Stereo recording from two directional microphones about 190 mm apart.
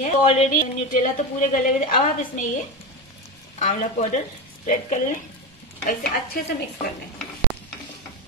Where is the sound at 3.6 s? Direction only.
35° left (ahead or behind).